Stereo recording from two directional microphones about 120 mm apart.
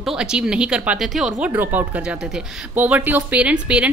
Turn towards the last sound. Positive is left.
turn(degrees=-10)  # may be behind; listen again after turning